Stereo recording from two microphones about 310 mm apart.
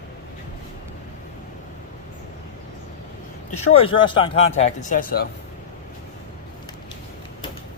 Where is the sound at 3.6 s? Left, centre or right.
Centre.